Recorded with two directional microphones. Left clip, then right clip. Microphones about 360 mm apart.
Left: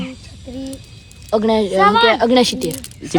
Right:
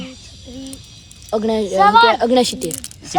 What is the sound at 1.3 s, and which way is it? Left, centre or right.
A woman's voice, centre.